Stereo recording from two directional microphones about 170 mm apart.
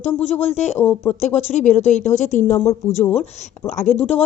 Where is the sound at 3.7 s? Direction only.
45° left (ahead or behind).